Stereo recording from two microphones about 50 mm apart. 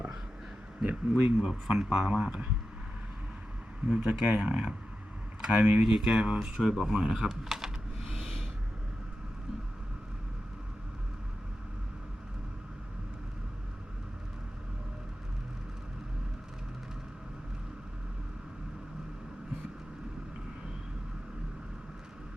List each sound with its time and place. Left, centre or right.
0.8 s speech: right
1.4 s speech: centre
3.8 s speech: centre
5.4 s a sound: centre
5.8 s speech: right
6.6 s speech: centre